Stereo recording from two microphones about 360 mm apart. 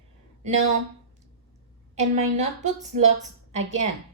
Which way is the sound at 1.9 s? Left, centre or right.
Centre.